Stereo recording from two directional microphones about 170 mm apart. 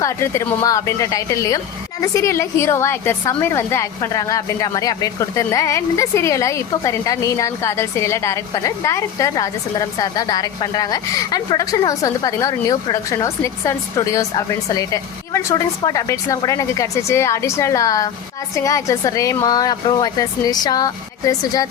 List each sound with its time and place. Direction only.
0.0 s a woman's voice: 20° left (ahead or behind)